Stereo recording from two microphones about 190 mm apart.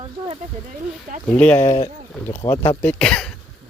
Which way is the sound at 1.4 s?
10° left (ahead or behind).